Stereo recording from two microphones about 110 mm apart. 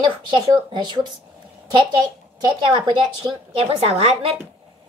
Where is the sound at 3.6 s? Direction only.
70° right (ahead or behind).